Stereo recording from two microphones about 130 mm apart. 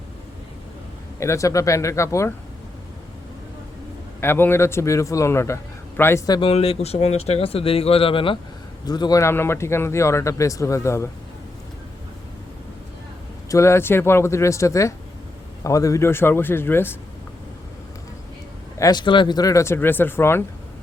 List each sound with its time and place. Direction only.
1.2 s speech: 25° left (ahead or behind)
4.2 s speech: 15° left (ahead or behind)
6.4 s speech: 50° left (ahead or behind)
8.9 s speech: 30° left (ahead or behind)
13.5 s a man's voice: 20° left (ahead or behind)
18.8 s speech: 35° left (ahead or behind); by 20.4 s 15° left (ahead or behind)